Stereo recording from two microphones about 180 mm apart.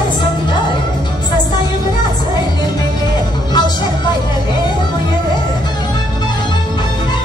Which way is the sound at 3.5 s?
25° left (ahead or behind).